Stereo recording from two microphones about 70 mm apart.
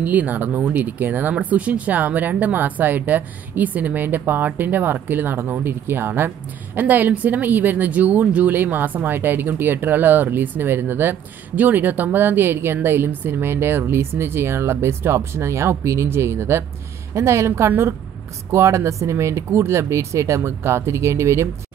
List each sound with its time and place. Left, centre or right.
0.0 s a woman's voice: right